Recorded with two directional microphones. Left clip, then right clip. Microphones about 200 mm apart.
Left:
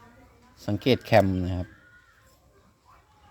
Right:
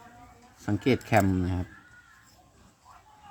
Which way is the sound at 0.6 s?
15° left (ahead or behind).